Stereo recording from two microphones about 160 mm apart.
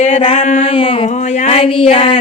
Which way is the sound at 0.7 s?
35° left (ahead or behind).